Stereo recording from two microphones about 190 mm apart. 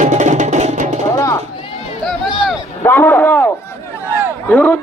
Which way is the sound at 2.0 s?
Centre (ahead or behind).